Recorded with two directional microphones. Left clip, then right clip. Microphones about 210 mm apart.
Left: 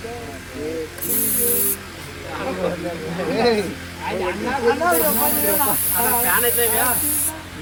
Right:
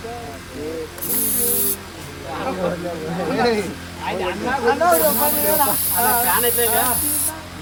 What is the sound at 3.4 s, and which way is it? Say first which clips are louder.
Speech: left 1 dB; centre (ahead or behind).